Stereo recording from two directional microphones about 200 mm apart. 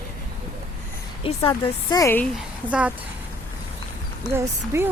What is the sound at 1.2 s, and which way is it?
Speech, 25° left (ahead or behind).